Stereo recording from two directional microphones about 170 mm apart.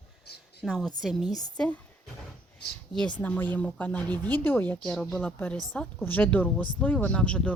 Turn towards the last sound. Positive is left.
turn(degrees=5)  # may be behind; listen again after turning